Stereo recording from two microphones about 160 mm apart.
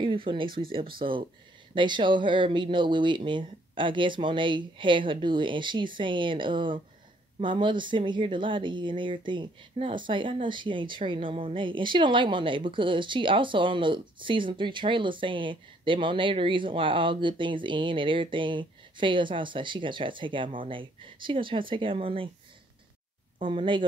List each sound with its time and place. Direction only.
0.0 s speech: 30° right (ahead or behind)
23.4 s speech: 30° right (ahead or behind)